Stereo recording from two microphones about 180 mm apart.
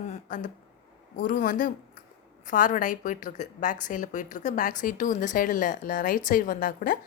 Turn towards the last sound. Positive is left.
turn(degrees=50)  # may be behind; listen again after turning